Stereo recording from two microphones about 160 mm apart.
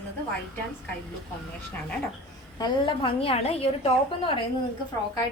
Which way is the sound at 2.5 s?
30° left (ahead or behind).